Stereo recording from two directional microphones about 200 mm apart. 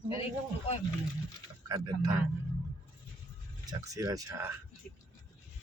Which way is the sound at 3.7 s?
15° right (ahead or behind).